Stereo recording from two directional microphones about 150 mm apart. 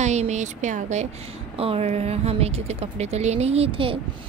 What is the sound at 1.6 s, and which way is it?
A woman's voice, 40° right (ahead or behind).